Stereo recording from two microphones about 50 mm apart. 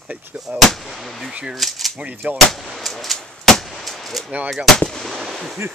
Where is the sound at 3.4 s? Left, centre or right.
Centre.